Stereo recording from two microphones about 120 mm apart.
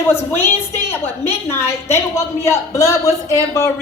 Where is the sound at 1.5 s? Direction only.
20° left (ahead or behind).